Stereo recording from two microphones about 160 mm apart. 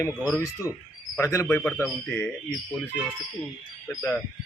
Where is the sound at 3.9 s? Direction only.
15° left (ahead or behind).